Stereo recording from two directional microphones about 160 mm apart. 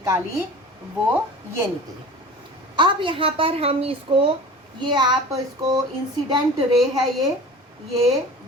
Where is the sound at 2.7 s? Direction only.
30° right (ahead or behind).